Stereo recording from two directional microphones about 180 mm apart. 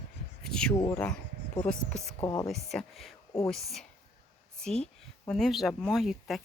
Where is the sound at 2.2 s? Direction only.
20° left (ahead or behind).